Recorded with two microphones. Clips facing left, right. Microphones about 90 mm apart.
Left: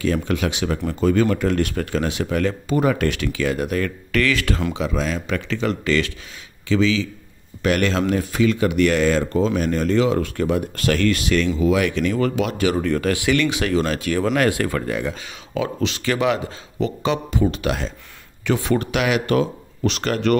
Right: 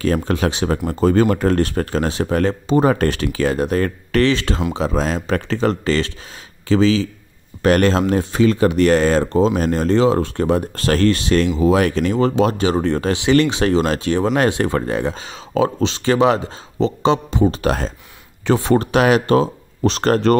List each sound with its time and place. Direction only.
0.0 s speech: 40° right (ahead or behind)